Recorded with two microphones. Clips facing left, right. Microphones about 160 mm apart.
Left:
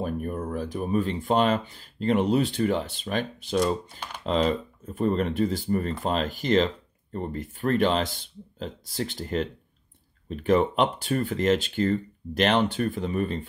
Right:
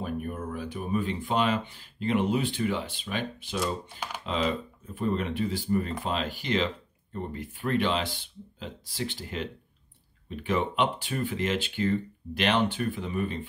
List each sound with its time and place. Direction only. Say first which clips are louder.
0.0 s speech: left 3 dB; 40° left (ahead or behind)